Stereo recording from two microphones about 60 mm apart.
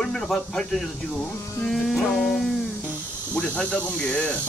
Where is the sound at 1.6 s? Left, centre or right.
Centre.